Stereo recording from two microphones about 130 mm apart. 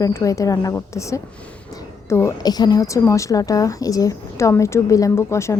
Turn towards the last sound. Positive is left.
turn(degrees=20)  # may be behind; listen again after turning